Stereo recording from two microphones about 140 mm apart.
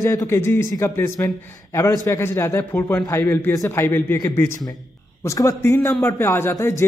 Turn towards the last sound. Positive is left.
turn(degrees=20)  # may be behind; listen again after turning